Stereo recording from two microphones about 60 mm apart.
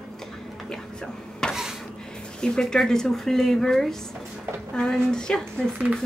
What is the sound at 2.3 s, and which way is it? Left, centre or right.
Speech, centre.